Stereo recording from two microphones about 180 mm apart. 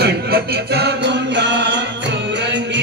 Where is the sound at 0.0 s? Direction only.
65° right (ahead or behind).